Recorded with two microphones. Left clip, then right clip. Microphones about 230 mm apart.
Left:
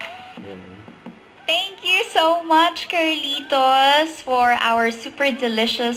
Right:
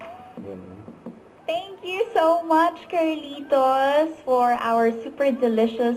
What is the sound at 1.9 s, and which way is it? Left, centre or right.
Speech, centre.